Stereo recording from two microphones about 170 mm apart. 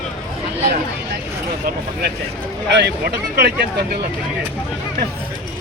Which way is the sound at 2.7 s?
80° right.